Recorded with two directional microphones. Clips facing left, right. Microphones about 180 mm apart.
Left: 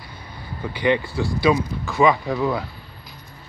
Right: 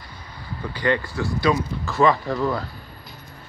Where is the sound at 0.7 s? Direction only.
15° left (ahead or behind).